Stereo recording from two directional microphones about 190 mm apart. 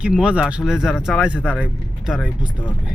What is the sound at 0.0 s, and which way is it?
Speech, 5° right (ahead or behind).